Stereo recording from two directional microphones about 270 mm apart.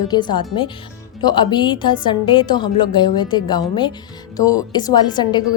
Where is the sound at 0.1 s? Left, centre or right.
Centre.